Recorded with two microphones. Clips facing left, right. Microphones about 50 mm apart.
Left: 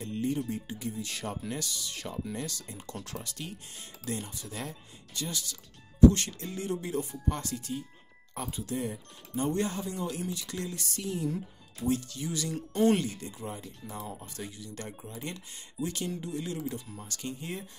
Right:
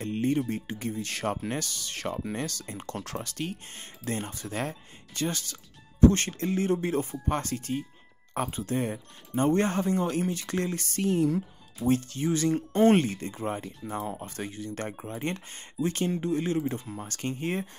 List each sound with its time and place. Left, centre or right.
0.0 s speech: right
11.8 s speech: right